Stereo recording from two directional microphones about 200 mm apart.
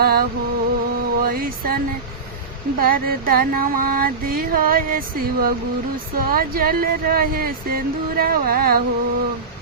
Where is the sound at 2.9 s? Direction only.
45° right (ahead or behind).